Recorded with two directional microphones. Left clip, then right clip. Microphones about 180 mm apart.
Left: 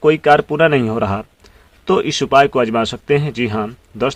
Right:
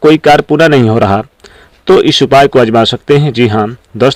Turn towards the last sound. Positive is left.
turn(degrees=-35)  # may be behind; listen again after turning